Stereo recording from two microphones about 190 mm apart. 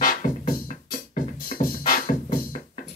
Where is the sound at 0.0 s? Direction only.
45° left (ahead or behind).